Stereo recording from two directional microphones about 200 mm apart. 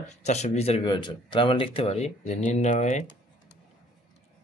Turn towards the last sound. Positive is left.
turn(degrees=40)  # may be behind; listen again after turning